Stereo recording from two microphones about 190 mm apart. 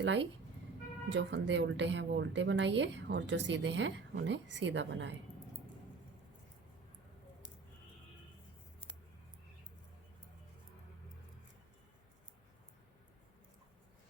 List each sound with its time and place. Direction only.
0.0 s a woman's voice: 75° right (ahead or behind)